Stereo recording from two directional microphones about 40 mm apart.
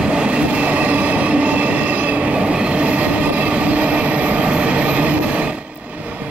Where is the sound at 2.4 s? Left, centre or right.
Right.